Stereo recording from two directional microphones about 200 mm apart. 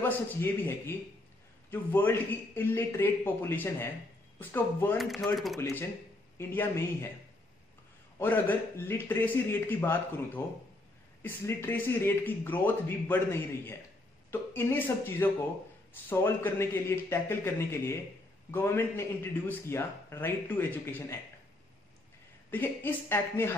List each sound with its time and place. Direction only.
0.3 s speech: 10° left (ahead or behind)
6.3 s speech: 10° left (ahead or behind)
8.2 s speech: 10° left (ahead or behind)
22.5 s speech: 10° left (ahead or behind)